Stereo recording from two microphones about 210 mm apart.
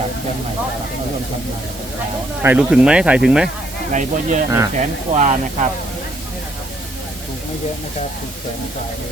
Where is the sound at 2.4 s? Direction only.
5° right (ahead or behind).